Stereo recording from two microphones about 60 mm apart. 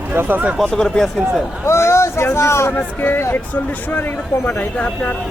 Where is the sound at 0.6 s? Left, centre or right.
Centre.